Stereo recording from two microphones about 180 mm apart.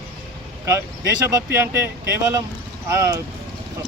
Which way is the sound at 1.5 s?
15° right (ahead or behind).